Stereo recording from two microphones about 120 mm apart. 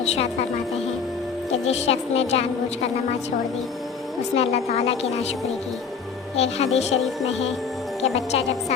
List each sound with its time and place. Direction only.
0.0 s music: 60° left (ahead or behind)
1.6 s a woman's voice: 65° left (ahead or behind)
4.4 s a woman's voice: 65° left (ahead or behind)
6.3 s a woman's voice: 60° left (ahead or behind)